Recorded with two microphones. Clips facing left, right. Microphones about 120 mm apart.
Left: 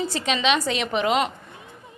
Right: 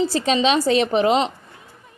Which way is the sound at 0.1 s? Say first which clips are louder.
Right 4 dB; 35° right (ahead or behind).